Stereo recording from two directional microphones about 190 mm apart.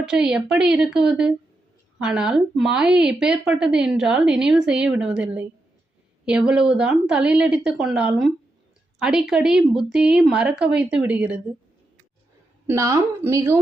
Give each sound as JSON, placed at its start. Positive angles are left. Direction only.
{"t": 0.0, "sound": "a woman's voice", "side_deg": -5}
{"t": 12.6, "sound": "speech", "side_deg": -15}